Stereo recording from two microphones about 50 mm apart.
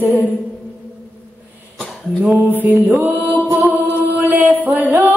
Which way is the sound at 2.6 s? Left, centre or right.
Right.